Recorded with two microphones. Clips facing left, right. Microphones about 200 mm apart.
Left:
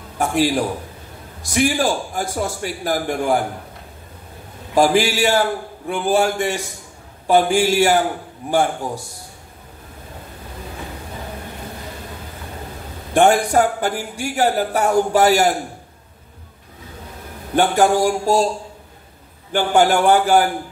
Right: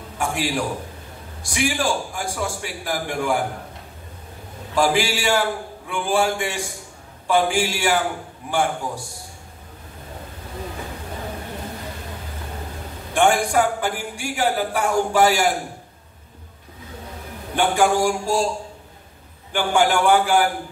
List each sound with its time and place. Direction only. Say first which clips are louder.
0.2 s a man's voice: left 6 dB; 40° left (ahead or behind)
4.7 s a man's voice: left 4 dB; 40° left (ahead or behind)
13.1 s a man's voice: left 4 dB; 40° left (ahead or behind)
17.6 s a man's voice: left 3 dB; 40° left (ahead or behind)
19.5 s a man's voice: left 4 dB; 40° left (ahead or behind)